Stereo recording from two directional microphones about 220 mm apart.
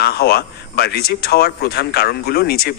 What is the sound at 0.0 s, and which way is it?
A man's voice, 45° left (ahead or behind).